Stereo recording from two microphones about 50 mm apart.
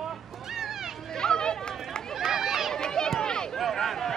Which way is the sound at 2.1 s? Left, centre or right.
Centre.